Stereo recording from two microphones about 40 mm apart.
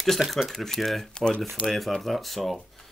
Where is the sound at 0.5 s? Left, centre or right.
Centre.